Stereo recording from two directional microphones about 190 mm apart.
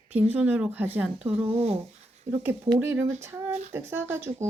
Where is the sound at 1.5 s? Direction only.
35° right (ahead or behind).